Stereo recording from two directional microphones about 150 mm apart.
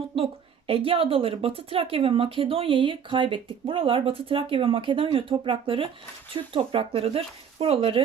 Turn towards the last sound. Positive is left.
turn(degrees=-40)  # may be behind; listen again after turning